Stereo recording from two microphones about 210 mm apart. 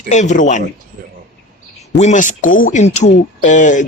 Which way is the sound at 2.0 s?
35° left (ahead or behind).